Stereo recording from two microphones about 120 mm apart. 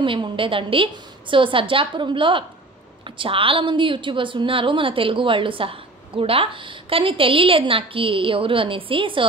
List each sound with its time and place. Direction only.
0.0 s a woman's voice: 45° right (ahead or behind)